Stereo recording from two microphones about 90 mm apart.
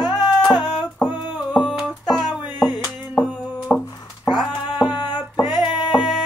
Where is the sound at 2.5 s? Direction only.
50° left (ahead or behind).